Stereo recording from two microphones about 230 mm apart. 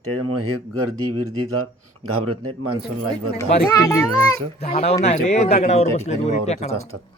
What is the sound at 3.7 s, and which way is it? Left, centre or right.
Speech, centre.